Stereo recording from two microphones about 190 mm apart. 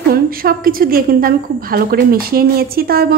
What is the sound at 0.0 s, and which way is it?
A woman's voice, 50° right (ahead or behind).